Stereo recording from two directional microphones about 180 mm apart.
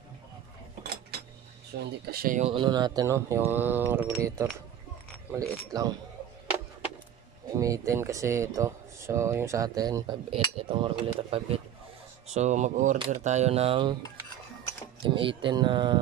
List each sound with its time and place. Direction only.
1.7 s speech: 80° right
2.0 s speech: 55° right (ahead or behind)
2.5 s speech: 25° right (ahead or behind)
7.5 s speech: 20° right (ahead or behind)
15.0 s speech: 30° right (ahead or behind)